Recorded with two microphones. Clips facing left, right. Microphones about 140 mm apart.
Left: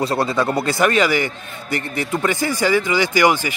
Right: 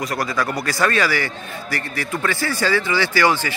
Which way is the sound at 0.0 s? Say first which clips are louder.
Left 4 dB; 30° left (ahead or behind).